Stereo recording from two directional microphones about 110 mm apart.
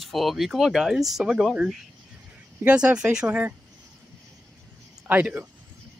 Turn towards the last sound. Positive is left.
turn(degrees=-15)  # may be behind; listen again after turning